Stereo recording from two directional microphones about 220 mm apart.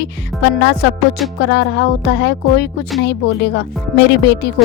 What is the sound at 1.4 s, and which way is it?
A woman's voice, 50° left (ahead or behind).